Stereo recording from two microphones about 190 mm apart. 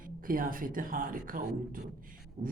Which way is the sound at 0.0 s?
45° right (ahead or behind).